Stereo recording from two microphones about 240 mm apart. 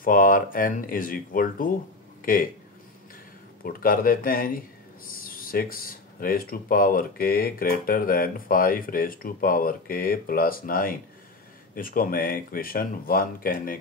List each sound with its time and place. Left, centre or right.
0.0 s speech: left
3.6 s speech: left